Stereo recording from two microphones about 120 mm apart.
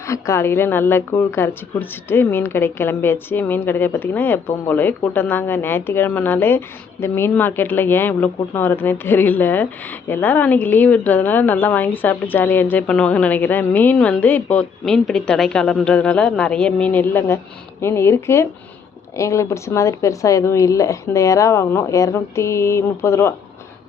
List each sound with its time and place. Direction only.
0.1 s a woman's voice: 25° left (ahead or behind)